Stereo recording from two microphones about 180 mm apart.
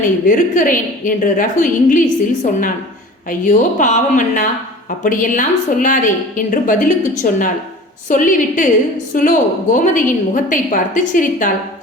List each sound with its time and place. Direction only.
0.3 s a woman's voice: 45° left (ahead or behind)